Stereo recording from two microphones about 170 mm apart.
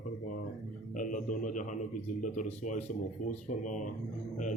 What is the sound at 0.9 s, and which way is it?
A man's voice, 50° left (ahead or behind).